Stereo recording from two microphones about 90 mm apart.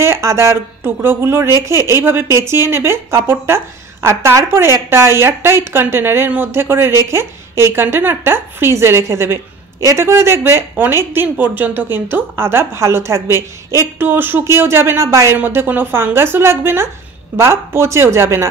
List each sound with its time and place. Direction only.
0.0 s a woman's voice: 30° right (ahead or behind)